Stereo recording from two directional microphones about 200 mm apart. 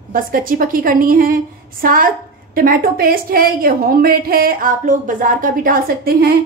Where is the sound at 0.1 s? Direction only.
45° right (ahead or behind).